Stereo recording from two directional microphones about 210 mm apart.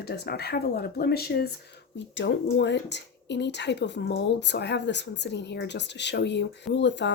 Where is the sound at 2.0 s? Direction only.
60° left (ahead or behind).